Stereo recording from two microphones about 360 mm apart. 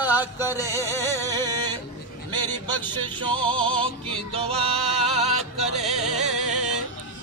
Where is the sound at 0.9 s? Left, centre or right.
Centre.